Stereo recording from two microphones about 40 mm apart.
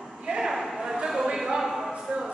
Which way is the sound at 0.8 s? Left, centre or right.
Centre.